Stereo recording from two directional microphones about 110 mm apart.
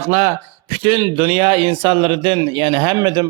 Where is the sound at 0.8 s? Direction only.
50° right (ahead or behind).